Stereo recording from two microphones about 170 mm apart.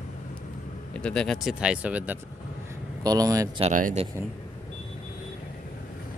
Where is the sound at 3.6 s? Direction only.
50° right (ahead or behind).